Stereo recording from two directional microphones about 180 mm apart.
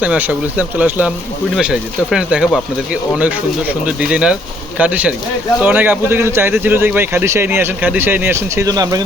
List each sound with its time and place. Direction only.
0.0 s speech: 10° right (ahead or behind)